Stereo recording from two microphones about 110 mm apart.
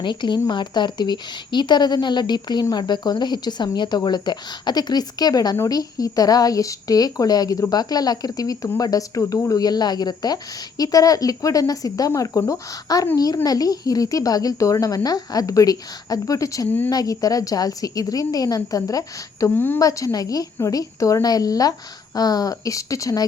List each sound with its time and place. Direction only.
0.0 s speech: 45° left (ahead or behind)
16.6 s speech: 15° left (ahead or behind)
16.9 s speech: 35° left (ahead or behind)
19.5 s speech: 20° left (ahead or behind)
19.8 s speech: 30° left (ahead or behind)